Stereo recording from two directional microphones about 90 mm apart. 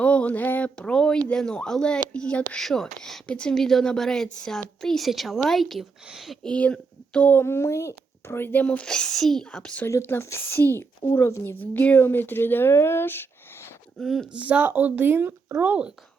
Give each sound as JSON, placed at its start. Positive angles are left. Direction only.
{"t": 0.0, "sound": "a woman's voice", "side_deg": 15}
{"t": 6.4, "sound": "speech", "side_deg": 10}
{"t": 8.6, "sound": "speech", "side_deg": 10}
{"t": 9.8, "sound": "speech", "side_deg": 30}
{"t": 11.6, "sound": "speech", "side_deg": 20}
{"t": 14.0, "sound": "a woman's voice", "side_deg": 0}
{"t": 14.3, "sound": "speech", "side_deg": -15}